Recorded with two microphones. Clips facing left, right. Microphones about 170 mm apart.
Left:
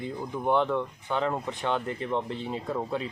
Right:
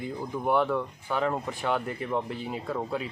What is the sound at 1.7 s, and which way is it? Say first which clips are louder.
Speech: even; 25° left (ahead or behind).